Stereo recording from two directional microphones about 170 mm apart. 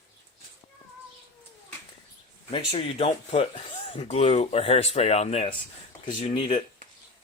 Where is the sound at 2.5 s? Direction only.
30° left (ahead or behind).